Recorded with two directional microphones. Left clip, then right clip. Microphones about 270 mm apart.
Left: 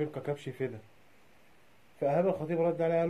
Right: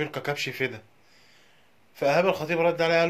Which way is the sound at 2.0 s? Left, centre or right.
Centre.